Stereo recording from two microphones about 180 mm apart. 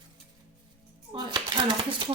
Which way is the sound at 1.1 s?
25° right (ahead or behind).